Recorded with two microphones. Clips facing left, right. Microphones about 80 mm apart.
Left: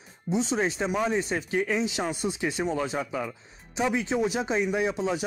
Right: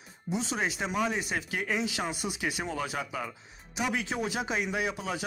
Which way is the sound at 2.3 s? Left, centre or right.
Left.